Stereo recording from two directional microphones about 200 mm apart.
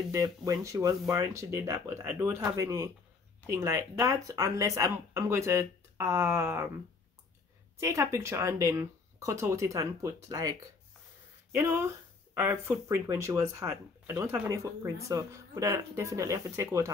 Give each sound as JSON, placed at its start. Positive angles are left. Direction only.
{"t": 0.1, "sound": "speech", "side_deg": -15}
{"t": 7.8, "sound": "speech", "side_deg": -15}
{"t": 11.5, "sound": "speech", "side_deg": -15}